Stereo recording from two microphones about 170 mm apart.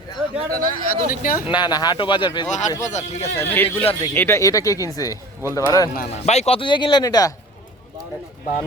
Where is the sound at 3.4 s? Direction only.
15° left (ahead or behind).